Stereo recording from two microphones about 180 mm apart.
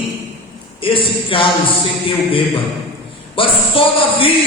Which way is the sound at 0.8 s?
30° left (ahead or behind).